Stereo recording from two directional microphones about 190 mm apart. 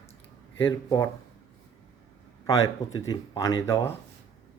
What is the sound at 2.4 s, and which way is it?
Speech, 20° left (ahead or behind).